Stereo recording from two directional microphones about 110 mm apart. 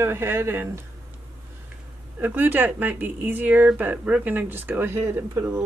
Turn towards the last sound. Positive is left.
turn(degrees=-25)  # may be behind; listen again after turning